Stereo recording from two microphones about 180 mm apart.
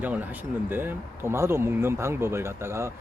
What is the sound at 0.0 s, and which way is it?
Speech, 10° right (ahead or behind).